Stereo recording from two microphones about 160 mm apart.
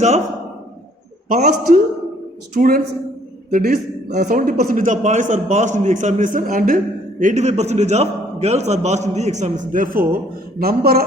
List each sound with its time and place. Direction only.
1.3 s a man's voice: 55° right (ahead or behind)
4.2 s a man's voice: 55° right (ahead or behind); by 11.0 s 70° right (ahead or behind)